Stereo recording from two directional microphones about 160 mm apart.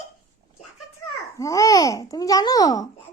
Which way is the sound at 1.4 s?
20° left (ahead or behind).